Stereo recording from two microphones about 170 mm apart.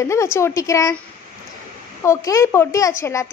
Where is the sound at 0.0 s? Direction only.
15° left (ahead or behind).